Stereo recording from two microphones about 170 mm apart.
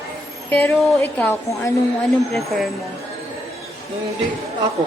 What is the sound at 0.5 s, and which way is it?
A woman's voice, 10° left (ahead or behind).